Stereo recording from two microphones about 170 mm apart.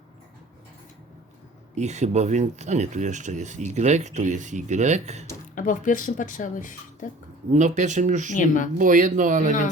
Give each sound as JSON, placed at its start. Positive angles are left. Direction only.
{"t": 1.7, "sound": "speech", "side_deg": -40}
{"t": 5.5, "sound": "speech", "side_deg": 50}
{"t": 7.5, "sound": "speech", "side_deg": -45}
{"t": 8.4, "sound": "speech", "side_deg": 50}
{"t": 8.8, "sound": "speech", "side_deg": -50}